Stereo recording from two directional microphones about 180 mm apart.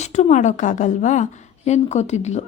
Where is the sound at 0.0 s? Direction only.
40° left (ahead or behind).